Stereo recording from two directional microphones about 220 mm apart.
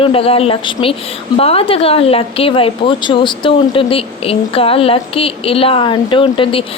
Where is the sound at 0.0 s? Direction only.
25° left (ahead or behind).